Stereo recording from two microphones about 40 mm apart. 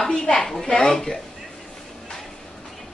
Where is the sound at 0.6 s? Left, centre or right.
Centre.